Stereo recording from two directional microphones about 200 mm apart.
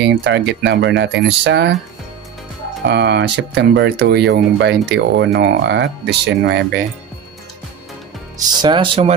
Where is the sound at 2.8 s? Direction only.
60° right (ahead or behind).